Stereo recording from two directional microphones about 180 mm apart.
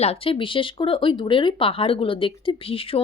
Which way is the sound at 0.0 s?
30° left (ahead or behind).